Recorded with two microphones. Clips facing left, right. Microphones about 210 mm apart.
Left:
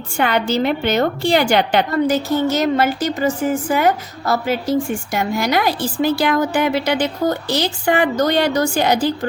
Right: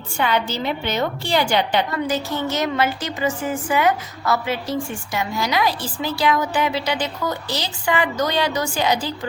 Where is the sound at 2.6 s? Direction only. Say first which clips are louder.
Left 5 dB; 40° left (ahead or behind).